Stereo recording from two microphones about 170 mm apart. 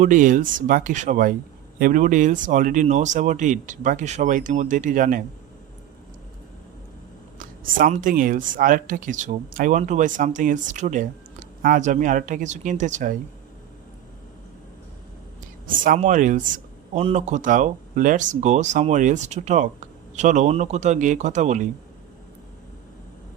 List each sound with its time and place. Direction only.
0.0 s speech: 50° right (ahead or behind)
7.3 s speech: 50° right (ahead or behind)
15.8 s speech: 50° right (ahead or behind)